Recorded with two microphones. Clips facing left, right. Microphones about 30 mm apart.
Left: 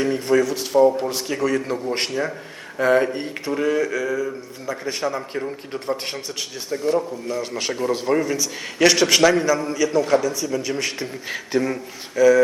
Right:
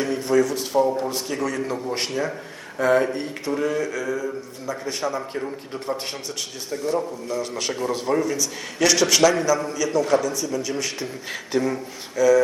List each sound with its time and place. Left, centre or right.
0.0 s a man's voice: centre
4.9 s a man's voice: centre
5.4 s a man's voice: centre
5.8 s a man's voice: centre
10.5 s a man's voice: left